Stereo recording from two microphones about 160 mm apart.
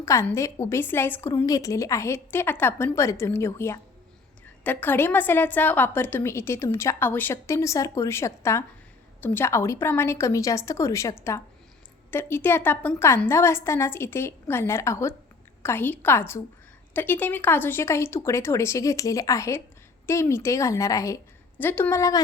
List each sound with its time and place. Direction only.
0.0 s a woman's voice: 15° left (ahead or behind)